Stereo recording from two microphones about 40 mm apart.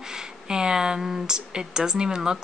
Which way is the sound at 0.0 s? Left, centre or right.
Centre.